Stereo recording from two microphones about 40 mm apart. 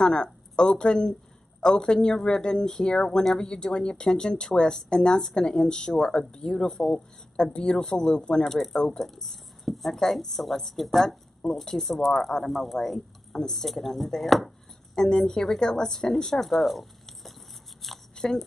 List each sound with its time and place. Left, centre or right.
0.0 s a woman's voice: centre
15.0 s speech: centre
16.4 s a sound: centre
18.1 s biting: centre